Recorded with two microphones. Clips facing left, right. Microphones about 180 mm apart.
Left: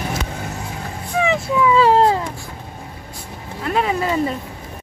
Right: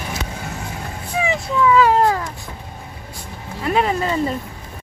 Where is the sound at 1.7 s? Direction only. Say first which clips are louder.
Left 2 dB; 30° left (ahead or behind).